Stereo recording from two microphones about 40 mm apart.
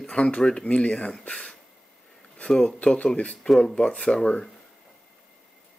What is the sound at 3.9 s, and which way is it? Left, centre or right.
Speech, left.